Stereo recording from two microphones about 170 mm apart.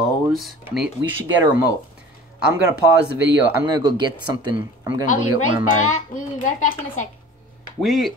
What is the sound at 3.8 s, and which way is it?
Speech, 25° right (ahead or behind).